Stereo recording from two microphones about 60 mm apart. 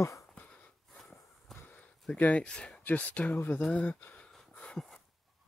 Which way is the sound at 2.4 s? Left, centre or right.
Centre.